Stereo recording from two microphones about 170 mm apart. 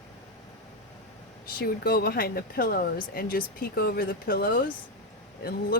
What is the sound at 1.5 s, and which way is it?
Speech, 65° left (ahead or behind).